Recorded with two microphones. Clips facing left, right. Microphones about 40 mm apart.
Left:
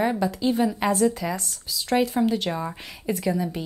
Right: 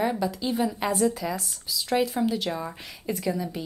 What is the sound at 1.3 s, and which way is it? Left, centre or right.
Speech, centre.